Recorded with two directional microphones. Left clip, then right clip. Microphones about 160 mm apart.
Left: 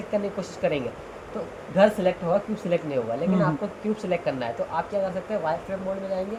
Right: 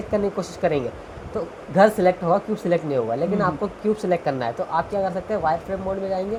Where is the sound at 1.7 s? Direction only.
55° right (ahead or behind).